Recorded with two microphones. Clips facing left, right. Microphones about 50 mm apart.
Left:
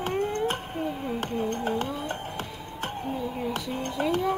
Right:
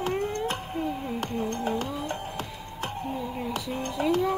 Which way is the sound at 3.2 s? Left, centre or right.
Centre.